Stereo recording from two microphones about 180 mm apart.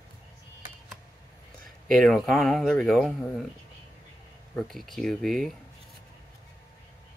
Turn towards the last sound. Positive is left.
turn(degrees=0)  # may be behind; listen again after turning